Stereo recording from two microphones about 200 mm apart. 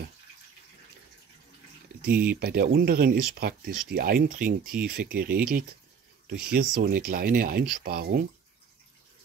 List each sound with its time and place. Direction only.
2.4 s speech: 50° right (ahead or behind)